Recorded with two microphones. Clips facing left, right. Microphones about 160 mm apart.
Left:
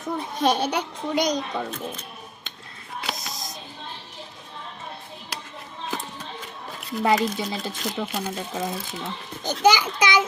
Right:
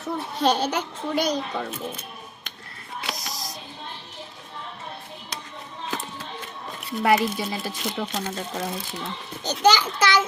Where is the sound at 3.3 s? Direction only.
20° left (ahead or behind).